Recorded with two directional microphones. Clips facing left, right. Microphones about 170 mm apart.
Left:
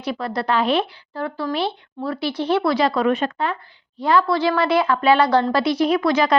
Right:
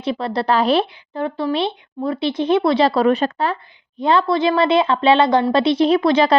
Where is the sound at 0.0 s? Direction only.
25° right (ahead or behind).